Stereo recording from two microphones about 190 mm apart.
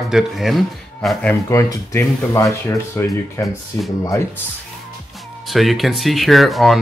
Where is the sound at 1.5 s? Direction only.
15° left (ahead or behind).